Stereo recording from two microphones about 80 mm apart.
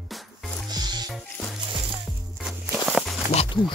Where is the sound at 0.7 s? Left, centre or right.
Right.